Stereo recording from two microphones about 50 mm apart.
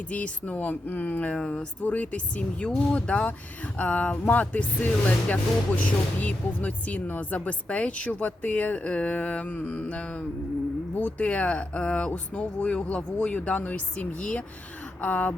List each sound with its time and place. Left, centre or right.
0.1 s speech: left
1.4 s speech: left
1.8 s speech: left